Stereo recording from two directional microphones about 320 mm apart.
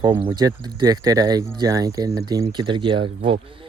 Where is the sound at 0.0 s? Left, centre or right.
Centre.